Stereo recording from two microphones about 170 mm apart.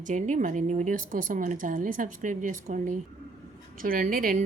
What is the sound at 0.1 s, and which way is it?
A woman's voice, 45° right (ahead or behind).